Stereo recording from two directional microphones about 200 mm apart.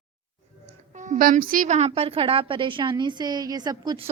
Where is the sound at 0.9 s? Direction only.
35° right (ahead or behind); by 4.1 s 20° right (ahead or behind).